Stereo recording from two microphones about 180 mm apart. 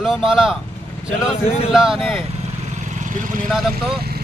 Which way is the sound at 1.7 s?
Centre (ahead or behind).